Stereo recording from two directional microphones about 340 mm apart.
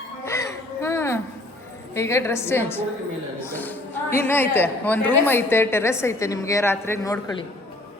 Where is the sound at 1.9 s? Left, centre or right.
Centre.